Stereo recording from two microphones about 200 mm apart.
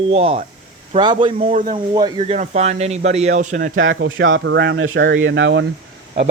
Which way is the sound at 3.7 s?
75° right (ahead or behind).